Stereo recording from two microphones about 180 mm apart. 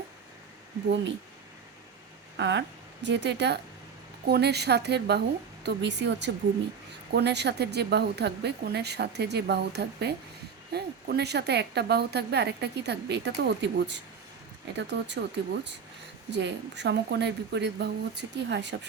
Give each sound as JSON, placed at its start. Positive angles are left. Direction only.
{"t": 0.9, "sound": "speech", "side_deg": -90}
{"t": 2.4, "sound": "a woman's voice", "side_deg": -80}
{"t": 16.3, "sound": "speech", "side_deg": -75}